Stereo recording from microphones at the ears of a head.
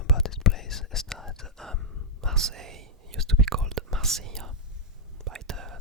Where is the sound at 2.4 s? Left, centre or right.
Right.